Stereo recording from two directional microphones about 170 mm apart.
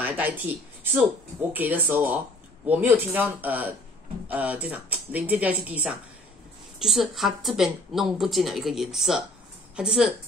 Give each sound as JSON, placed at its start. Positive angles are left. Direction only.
{"t": 0.0, "sound": "speech", "side_deg": -10}
{"t": 1.5, "sound": "speech", "side_deg": -10}